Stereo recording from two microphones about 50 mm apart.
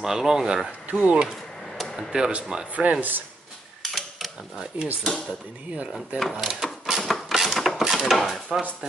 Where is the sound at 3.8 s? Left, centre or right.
Centre.